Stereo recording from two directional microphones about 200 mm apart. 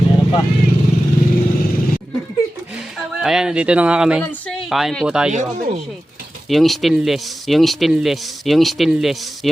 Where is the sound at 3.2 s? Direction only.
5° right (ahead or behind).